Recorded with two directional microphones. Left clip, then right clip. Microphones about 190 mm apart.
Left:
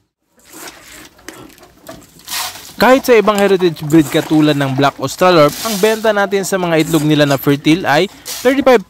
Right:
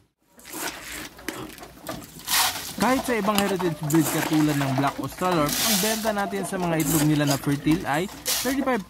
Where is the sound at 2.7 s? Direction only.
35° left (ahead or behind).